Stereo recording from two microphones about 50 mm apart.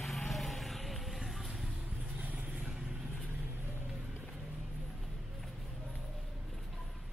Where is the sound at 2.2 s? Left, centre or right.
Right.